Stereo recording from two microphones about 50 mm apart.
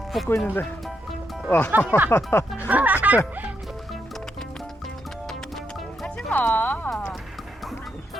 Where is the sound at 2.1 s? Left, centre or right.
Left.